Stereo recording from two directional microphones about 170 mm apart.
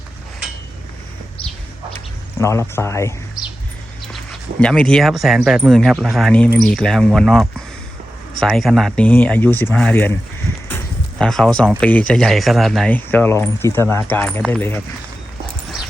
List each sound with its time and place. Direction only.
2.4 s speech: 15° left (ahead or behind)
4.1 s speech: 5° left (ahead or behind)
11.2 s speech: 5° left (ahead or behind)